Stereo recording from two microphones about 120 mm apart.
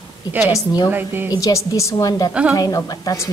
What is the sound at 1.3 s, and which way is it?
A woman's voice, 30° left (ahead or behind).